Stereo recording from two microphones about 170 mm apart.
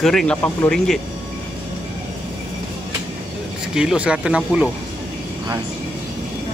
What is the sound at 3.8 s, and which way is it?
Speech, 5° right (ahead or behind).